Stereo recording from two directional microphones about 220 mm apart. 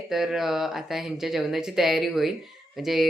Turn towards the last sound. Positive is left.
turn(degrees=0)  # may be behind; listen again after turning